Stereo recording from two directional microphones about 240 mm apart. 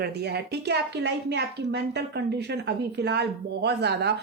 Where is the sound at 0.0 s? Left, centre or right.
Right.